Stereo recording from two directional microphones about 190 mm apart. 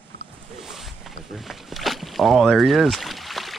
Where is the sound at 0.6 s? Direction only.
Centre (ahead or behind).